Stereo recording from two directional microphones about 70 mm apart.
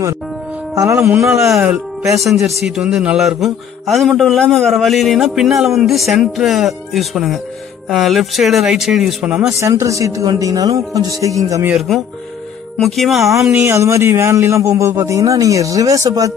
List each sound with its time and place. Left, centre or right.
0.7 s speech: right
2.1 s a man's voice: centre
2.6 s a man's voice: centre
9.6 s speech: right
12.8 s a man's voice: centre
13.5 s speech: right